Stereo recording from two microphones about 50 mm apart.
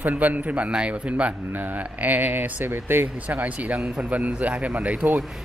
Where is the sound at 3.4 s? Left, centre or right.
Right.